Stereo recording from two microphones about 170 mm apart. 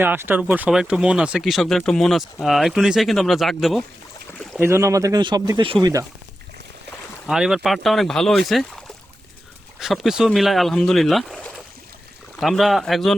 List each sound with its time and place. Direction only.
0.0 s speech: 10° right (ahead or behind)
4.5 s speech: 15° right (ahead or behind)
7.3 s speech: 5° right (ahead or behind)
9.8 s speech: centre (ahead or behind)